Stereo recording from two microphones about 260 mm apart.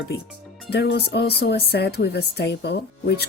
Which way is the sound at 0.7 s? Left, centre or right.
Left.